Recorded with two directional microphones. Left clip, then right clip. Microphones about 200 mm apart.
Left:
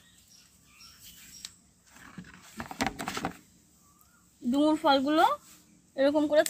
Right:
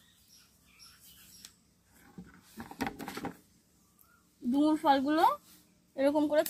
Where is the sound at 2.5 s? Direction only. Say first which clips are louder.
Left 6 dB; 40° left (ahead or behind).